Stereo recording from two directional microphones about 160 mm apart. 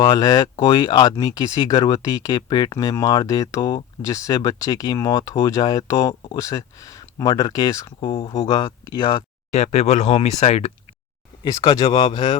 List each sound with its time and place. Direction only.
0.0 s speech: 25° left (ahead or behind)
8.0 s speech: 30° left (ahead or behind)
9.5 s speech: 45° left (ahead or behind)
11.6 s speech: 35° left (ahead or behind)